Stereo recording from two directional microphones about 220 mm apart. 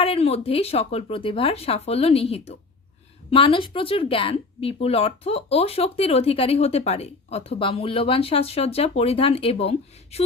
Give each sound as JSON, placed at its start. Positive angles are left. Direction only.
{"t": 0.0, "sound": "speech", "side_deg": 25}